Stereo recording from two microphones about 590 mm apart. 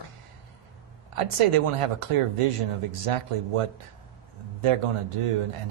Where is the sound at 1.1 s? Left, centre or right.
Right.